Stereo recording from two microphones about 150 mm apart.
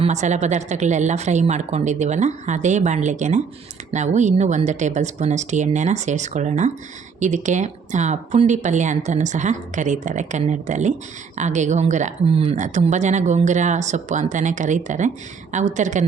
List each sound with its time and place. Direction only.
0.0 s speech: 50° right (ahead or behind)